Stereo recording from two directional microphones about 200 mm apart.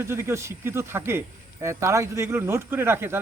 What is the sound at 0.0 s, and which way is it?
A man's voice, 10° right (ahead or behind).